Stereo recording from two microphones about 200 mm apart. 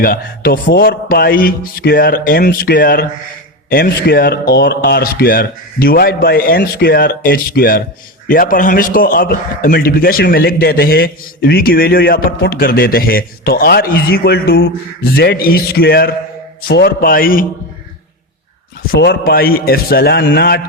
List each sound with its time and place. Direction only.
0.0 s a man's voice: 45° left (ahead or behind)
18.9 s a man's voice: 50° left (ahead or behind)